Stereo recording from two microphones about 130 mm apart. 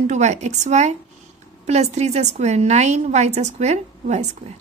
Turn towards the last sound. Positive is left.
turn(degrees=-60)  # may be behind; listen again after turning